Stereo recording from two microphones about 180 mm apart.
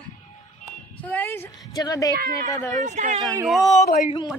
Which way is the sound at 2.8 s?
40° right (ahead or behind).